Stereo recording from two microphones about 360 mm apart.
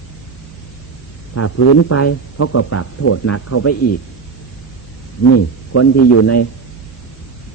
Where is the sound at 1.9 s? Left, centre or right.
Left.